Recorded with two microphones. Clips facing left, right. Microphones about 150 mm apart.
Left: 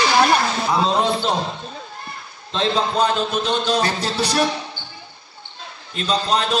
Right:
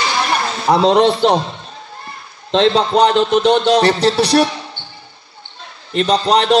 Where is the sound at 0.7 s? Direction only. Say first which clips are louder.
Right 9 dB; 80° right.